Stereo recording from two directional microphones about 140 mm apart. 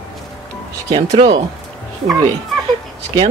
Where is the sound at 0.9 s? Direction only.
40° right (ahead or behind).